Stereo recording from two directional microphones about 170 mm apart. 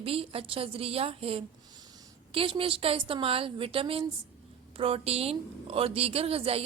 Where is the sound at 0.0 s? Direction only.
35° right (ahead or behind).